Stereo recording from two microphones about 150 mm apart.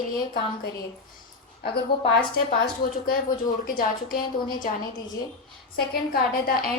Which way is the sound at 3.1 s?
70° left (ahead or behind).